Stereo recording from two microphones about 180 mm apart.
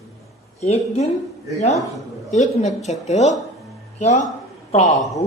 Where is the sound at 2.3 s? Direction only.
40° left (ahead or behind).